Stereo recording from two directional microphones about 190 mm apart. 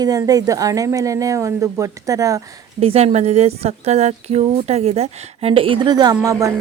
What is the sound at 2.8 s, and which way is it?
A woman's voice, 30° right (ahead or behind).